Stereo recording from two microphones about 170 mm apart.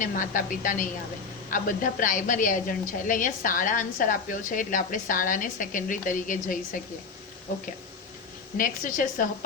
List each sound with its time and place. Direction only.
0.0 s a woman's voice: 50° left (ahead or behind)